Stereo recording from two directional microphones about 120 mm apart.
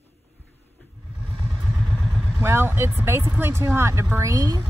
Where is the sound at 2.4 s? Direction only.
20° right (ahead or behind).